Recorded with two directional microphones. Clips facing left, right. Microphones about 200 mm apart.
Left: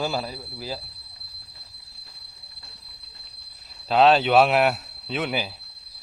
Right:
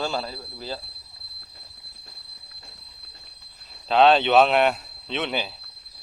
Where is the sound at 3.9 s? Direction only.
5° left (ahead or behind).